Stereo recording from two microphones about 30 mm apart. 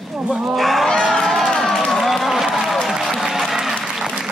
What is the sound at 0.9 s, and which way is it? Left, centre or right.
Crowd, centre.